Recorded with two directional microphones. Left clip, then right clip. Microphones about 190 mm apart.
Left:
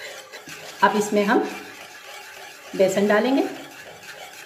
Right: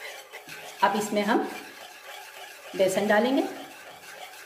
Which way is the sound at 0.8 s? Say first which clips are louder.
Left 5 dB; 10° right (ahead or behind).